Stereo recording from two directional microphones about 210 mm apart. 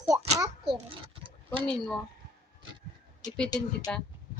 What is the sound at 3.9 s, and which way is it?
Speech, 5° left (ahead or behind).